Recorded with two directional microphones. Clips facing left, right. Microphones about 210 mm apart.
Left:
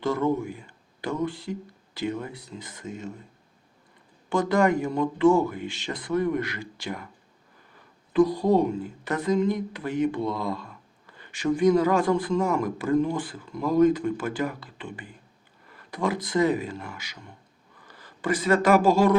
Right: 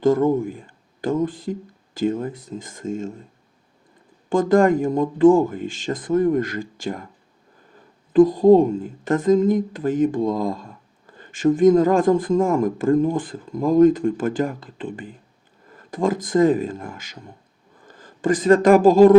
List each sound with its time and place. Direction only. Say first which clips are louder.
0.0 s speech: right 7 dB; 50° right (ahead or behind)
4.3 s speech: right 6 dB; 50° right (ahead or behind)
8.1 s speech: right 8 dB; 50° right (ahead or behind)
10.7 s a sound: right 5 dB; 45° right (ahead or behind)
11.5 s speech: right 5 dB; 45° right (ahead or behind)